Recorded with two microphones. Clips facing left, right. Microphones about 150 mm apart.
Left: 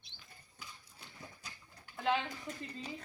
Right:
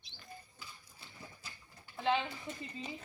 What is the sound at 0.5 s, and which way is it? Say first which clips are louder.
Horse: even; centre (ahead or behind).